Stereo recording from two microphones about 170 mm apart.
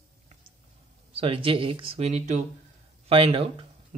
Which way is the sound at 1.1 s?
35° right (ahead or behind).